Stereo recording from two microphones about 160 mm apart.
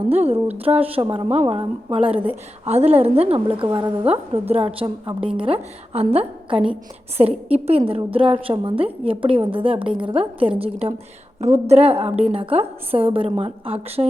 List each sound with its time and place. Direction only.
0.1 s a woman's voice: 40° right (ahead or behind)
4.0 s a woman's voice: 40° right (ahead or behind)
7.2 s a woman's voice: 40° right (ahead or behind)